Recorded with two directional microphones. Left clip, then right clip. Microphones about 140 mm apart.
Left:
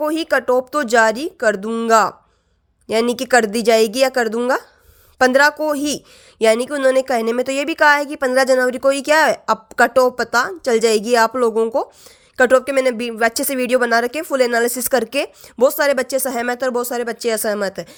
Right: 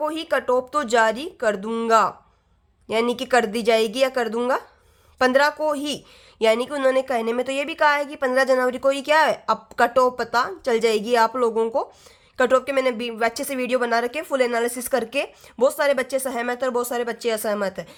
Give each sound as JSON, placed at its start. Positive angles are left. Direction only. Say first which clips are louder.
{"t": 0.0, "sound": "speech", "louder": "left 5 dB", "side_deg": 40}
{"t": 2.8, "sound": "speech", "louder": "left 4 dB", "side_deg": 45}